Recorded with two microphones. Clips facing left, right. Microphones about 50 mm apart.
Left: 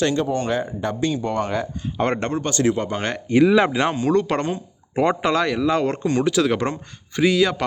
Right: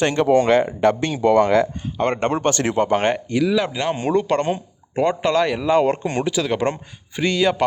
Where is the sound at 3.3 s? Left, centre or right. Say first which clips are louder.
Left 4 dB; left.